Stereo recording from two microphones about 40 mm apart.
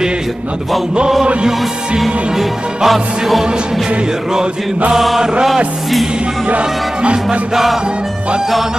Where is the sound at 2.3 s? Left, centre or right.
Centre.